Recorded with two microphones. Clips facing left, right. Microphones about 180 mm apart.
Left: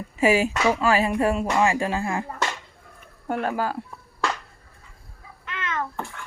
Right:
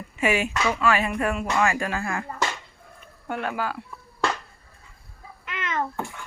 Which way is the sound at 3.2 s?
40° left (ahead or behind).